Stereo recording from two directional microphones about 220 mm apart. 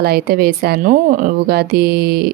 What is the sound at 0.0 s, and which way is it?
A woman's voice, 45° right (ahead or behind).